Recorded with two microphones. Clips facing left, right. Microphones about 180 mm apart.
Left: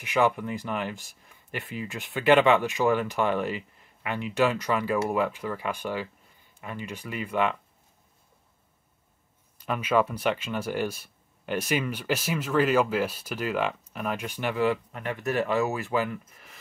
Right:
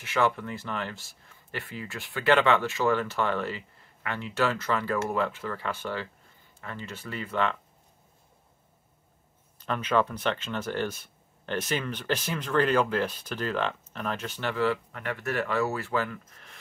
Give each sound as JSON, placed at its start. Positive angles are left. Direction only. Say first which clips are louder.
{"t": 0.0, "sound": "speech", "louder": "left 2 dB", "side_deg": 15}
{"t": 9.6, "sound": "speech", "louder": "left 2 dB", "side_deg": 10}